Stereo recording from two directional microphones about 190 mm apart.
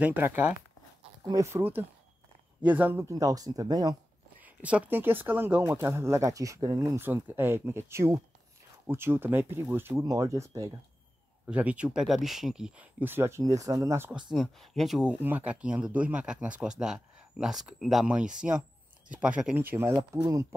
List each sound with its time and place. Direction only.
0.0 s speech: 10° right (ahead or behind)
4.4 s speech: 10° right (ahead or behind)
11.5 s speech: 5° right (ahead or behind)
14.3 s speech: centre (ahead or behind); by 20.4 s 15° right (ahead or behind)